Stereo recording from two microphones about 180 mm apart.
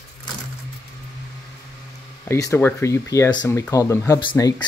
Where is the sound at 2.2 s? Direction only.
15° left (ahead or behind).